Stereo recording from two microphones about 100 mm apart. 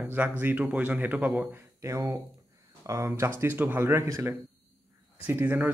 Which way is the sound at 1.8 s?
30° right (ahead or behind).